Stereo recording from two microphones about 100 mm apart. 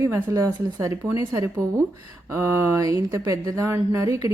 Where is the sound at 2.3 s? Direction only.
25° right (ahead or behind).